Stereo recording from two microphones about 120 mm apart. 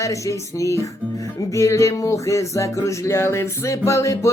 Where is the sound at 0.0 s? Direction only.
25° left (ahead or behind).